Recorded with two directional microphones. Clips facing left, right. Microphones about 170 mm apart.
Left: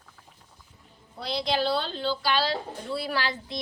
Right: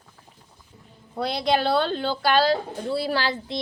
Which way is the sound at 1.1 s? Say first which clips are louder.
Right 6 dB; 55° right (ahead or behind).